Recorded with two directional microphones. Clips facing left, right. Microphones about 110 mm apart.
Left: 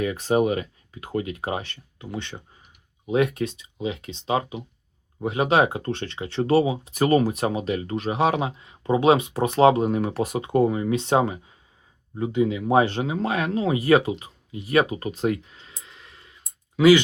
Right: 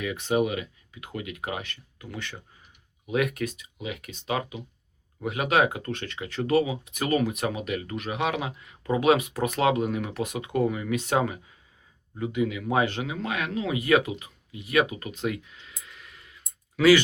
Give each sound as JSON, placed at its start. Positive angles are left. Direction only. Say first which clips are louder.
{"t": 0.0, "sound": "speech", "louder": "left 4 dB", "side_deg": 40}